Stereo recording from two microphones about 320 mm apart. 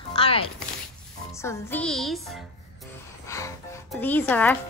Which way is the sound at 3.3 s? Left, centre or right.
Centre.